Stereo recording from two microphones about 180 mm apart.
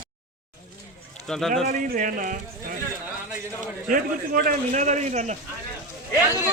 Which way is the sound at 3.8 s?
50° right (ahead or behind).